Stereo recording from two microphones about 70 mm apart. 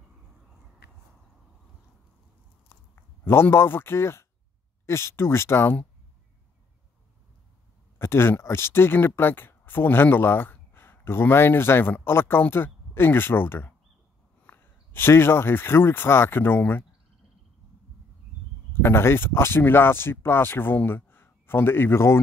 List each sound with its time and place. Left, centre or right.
2.7 s a sound: left
4.8 s speech: left
8.0 s speech: left
18.7 s speech: left